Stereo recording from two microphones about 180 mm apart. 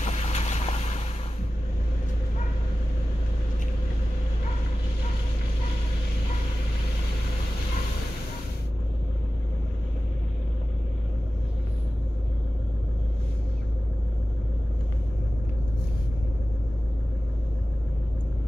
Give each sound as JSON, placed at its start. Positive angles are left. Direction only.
{"t": 0.0, "sound": "vehicle", "side_deg": 35}